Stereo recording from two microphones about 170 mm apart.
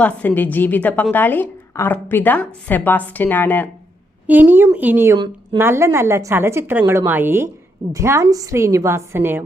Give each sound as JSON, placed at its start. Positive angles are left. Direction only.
{"t": 0.0, "sound": "a woman's voice", "side_deg": 10}
{"t": 4.3, "sound": "a woman's voice", "side_deg": -10}